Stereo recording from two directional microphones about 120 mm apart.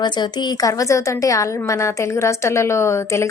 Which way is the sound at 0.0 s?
35° left (ahead or behind).